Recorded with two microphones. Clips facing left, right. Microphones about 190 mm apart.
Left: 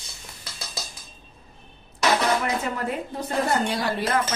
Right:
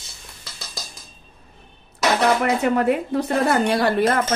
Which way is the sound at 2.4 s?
65° right (ahead or behind).